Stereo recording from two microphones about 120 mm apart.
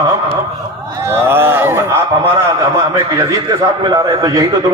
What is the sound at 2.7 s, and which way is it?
A man's voice, 30° right (ahead or behind).